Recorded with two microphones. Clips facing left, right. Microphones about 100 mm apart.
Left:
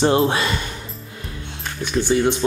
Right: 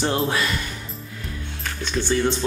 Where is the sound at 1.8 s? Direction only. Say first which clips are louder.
Left 4 dB; 15° left (ahead or behind).